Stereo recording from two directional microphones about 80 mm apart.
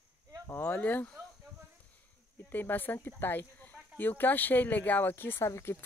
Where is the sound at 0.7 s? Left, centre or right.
Centre.